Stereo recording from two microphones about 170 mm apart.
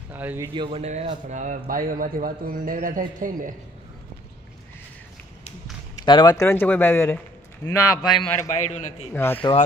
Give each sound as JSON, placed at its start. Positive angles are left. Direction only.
{"t": 0.1, "sound": "speech", "side_deg": -10}
{"t": 0.6, "sound": "a man's voice", "side_deg": -35}
{"t": 5.9, "sound": "speech", "side_deg": 25}
{"t": 8.1, "sound": "a man's voice", "side_deg": 5}
{"t": 8.5, "sound": "a man's voice", "side_deg": 45}
{"t": 9.1, "sound": "speech", "side_deg": 15}